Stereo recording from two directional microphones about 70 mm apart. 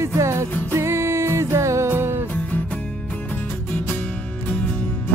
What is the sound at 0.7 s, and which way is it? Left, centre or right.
Music, right.